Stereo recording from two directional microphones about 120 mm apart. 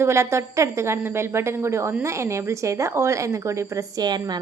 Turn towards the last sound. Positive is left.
turn(degrees=-30)  # may be behind; listen again after turning